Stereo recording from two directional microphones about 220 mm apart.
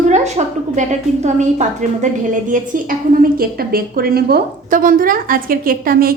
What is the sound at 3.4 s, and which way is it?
A woman's voice, 40° right (ahead or behind).